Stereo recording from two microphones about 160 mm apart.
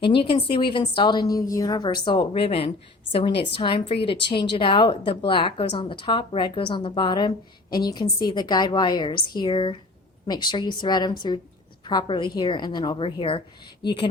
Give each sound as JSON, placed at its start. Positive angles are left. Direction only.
{"t": 0.0, "sound": "a woman's voice", "side_deg": 30}